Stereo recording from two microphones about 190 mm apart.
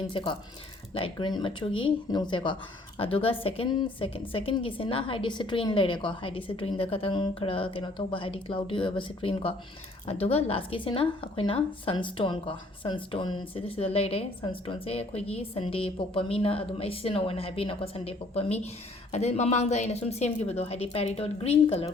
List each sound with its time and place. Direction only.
0.1 s a woman's voice: 25° left (ahead or behind)